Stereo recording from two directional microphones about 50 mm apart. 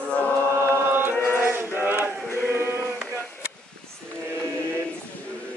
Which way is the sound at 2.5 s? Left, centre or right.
Right.